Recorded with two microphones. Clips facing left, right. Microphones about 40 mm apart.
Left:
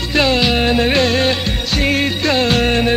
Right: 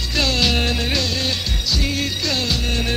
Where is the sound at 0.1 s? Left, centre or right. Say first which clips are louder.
Left 5 dB; left.